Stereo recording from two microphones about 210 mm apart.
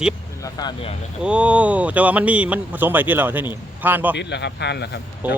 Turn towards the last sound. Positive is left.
turn(degrees=-10)  # may be behind; listen again after turning